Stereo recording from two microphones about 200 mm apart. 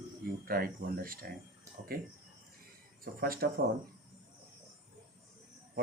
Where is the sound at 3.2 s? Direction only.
50° right (ahead or behind).